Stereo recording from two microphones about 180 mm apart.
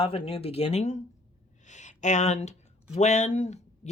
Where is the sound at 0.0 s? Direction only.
30° left (ahead or behind).